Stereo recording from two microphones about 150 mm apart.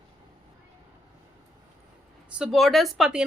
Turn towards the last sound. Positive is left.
turn(degrees=-5)  # may be behind; listen again after turning